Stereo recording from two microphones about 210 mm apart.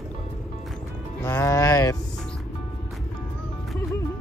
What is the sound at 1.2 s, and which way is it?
Music, 15° left (ahead or behind).